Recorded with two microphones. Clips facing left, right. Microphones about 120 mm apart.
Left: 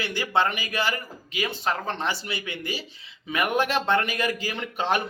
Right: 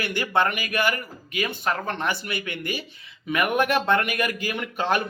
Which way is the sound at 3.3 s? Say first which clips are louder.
Right 2 dB; 30° left (ahead or behind).